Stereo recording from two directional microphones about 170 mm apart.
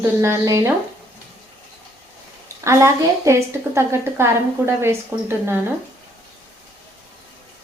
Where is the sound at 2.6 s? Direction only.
15° right (ahead or behind).